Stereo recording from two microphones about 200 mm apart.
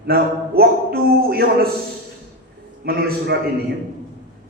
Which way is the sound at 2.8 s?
50° right (ahead or behind).